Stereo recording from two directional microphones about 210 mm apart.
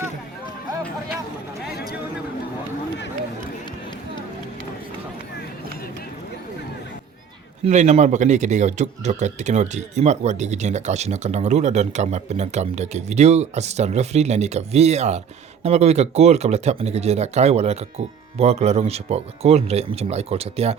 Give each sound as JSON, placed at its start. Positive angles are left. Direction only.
{"t": 7.6, "sound": "speech", "side_deg": -35}